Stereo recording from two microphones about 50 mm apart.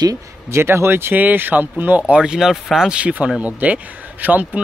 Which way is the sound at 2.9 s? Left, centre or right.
Right.